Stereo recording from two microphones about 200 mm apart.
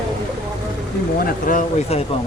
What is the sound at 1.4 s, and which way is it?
Speech, 35° left (ahead or behind).